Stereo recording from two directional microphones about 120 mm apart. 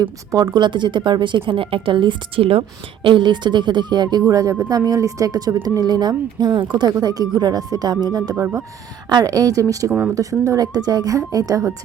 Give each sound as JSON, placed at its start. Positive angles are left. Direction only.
{"t": 0.0, "sound": "a woman's voice", "side_deg": -30}
{"t": 8.4, "sound": "a woman's voice", "side_deg": -20}
{"t": 9.0, "sound": "a woman's voice", "side_deg": -30}